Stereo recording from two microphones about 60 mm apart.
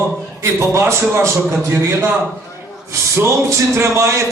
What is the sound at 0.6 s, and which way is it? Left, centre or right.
Speech, right.